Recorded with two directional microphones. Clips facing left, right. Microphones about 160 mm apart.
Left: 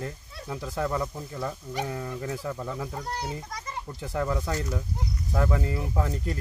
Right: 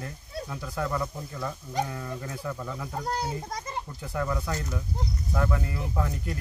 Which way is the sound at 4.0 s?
25° left (ahead or behind).